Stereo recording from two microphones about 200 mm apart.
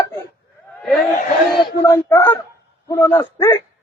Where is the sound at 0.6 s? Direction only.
5° left (ahead or behind).